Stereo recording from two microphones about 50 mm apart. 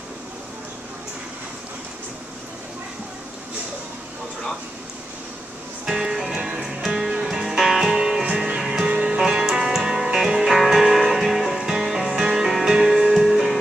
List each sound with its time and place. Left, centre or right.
5.9 s music: centre
9.2 s music: centre